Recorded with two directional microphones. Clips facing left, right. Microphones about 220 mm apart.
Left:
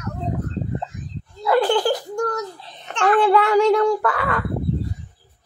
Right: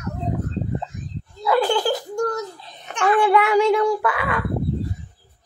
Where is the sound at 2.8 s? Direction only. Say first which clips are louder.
Left 1 dB; 10° right (ahead or behind).